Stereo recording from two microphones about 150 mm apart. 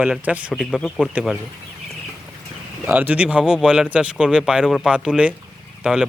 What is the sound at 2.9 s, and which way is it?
Speech, 10° right (ahead or behind).